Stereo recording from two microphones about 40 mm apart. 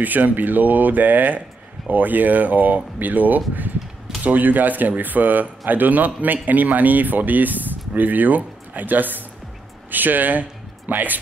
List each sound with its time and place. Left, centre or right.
0.0 s speech: right